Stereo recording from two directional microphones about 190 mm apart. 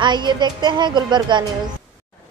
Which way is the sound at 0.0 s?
25° right (ahead or behind).